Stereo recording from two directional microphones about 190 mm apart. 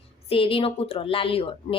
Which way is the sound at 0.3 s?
30° left (ahead or behind).